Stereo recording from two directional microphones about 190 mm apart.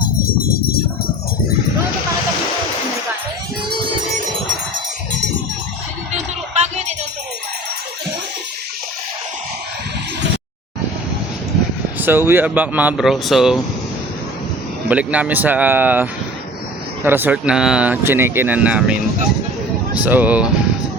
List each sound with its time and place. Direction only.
6.6 s music: 35° right (ahead or behind)
11.9 s speech: 10° right (ahead or behind)
14.8 s speech: 5° right (ahead or behind)
20.1 s speech: 10° right (ahead or behind)